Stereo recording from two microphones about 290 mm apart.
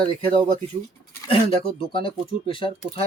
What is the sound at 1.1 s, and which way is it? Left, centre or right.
Speech, centre.